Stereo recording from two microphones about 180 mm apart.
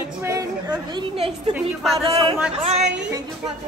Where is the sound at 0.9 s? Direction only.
30° right (ahead or behind).